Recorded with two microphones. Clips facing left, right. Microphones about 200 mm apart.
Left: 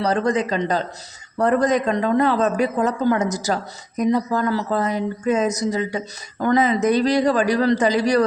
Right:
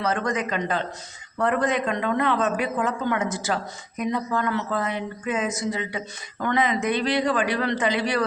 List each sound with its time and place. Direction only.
0.0 s speech: 35° left (ahead or behind)